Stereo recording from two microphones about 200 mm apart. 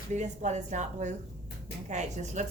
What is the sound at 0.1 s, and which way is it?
A woman's voice, 35° right (ahead or behind).